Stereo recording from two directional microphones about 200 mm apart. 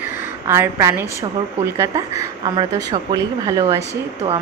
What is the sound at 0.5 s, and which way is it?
A woman's voice, 15° right (ahead or behind).